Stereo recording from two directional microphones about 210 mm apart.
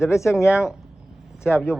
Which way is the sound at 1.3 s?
10° left (ahead or behind).